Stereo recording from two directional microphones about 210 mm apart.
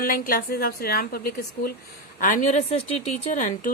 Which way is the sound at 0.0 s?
45° left (ahead or behind).